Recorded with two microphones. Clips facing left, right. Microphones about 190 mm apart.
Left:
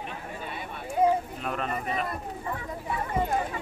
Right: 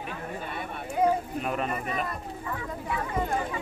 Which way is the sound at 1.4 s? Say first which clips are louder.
Right 2 dB; 5° right (ahead or behind).